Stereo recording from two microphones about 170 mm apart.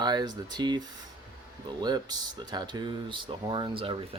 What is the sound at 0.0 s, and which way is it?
Speech, 25° right (ahead or behind).